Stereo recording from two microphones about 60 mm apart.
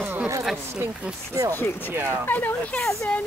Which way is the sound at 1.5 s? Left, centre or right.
Left.